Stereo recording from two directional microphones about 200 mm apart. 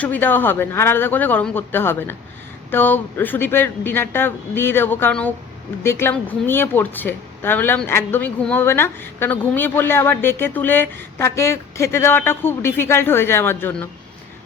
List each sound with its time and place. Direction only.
0.0 s speech: 10° left (ahead or behind)